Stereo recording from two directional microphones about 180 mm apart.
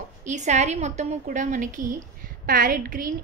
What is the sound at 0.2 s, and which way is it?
A woman's voice, 40° right (ahead or behind).